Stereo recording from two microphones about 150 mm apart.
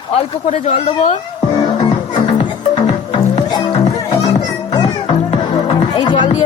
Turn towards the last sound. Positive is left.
turn(degrees=30)  # may be behind; listen again after turning